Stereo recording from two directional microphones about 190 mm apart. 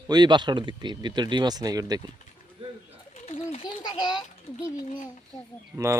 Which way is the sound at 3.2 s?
35° left (ahead or behind).